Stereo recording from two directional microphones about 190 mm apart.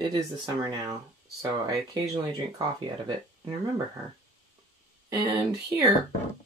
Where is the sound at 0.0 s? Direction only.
20° right (ahead or behind).